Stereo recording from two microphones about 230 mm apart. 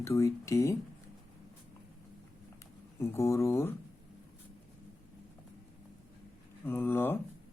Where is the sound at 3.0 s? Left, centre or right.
Centre.